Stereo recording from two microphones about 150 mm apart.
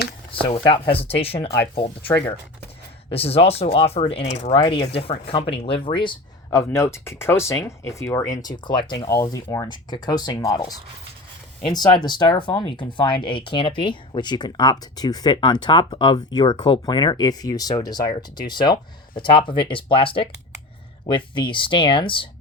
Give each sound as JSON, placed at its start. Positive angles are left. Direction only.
{"t": 0.3, "sound": "speech", "side_deg": 35}
{"t": 3.1, "sound": "speech", "side_deg": 40}
{"t": 6.5, "sound": "speech", "side_deg": 20}